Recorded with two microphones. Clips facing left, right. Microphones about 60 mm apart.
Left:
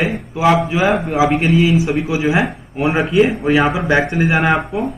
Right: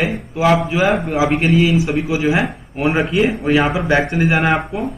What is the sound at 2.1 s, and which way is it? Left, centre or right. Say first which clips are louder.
Speech: left 1 dB; left.